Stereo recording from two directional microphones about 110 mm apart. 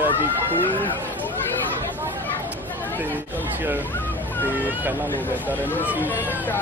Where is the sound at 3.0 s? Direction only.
15° right (ahead or behind).